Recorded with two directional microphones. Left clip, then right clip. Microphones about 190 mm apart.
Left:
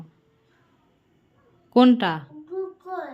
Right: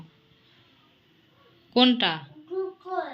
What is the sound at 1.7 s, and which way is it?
Speech, 45° left (ahead or behind).